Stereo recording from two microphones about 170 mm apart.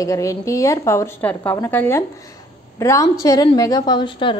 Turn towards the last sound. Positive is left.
turn(degrees=30)  # may be behind; listen again after turning